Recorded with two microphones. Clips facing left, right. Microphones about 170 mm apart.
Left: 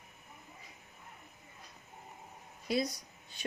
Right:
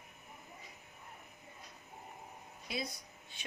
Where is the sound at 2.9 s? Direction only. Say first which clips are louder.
Even; 40° left (ahead or behind).